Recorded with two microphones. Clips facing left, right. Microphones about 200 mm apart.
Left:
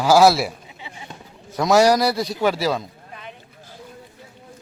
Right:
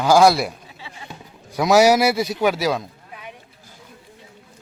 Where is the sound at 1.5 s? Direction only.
Centre (ahead or behind).